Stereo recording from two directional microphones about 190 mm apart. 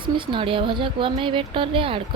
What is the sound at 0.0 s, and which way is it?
Speech, 25° right (ahead or behind).